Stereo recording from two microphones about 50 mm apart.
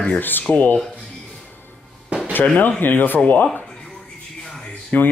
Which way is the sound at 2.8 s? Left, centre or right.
Left.